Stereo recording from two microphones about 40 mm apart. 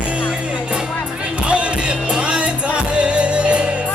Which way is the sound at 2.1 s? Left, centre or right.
Right.